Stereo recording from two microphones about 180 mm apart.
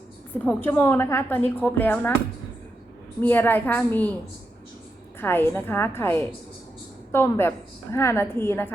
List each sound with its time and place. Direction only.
0.4 s speech: 10° left (ahead or behind)
3.2 s speech: 10° left (ahead or behind)
5.2 s speech: 10° left (ahead or behind)